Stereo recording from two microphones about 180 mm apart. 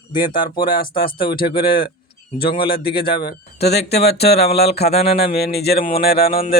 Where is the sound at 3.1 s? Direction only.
60° left (ahead or behind).